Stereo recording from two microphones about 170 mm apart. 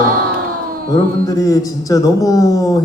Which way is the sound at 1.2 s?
20° left (ahead or behind).